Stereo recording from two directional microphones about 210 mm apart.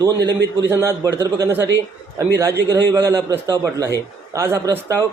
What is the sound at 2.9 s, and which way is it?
A man's voice, 15° right (ahead or behind).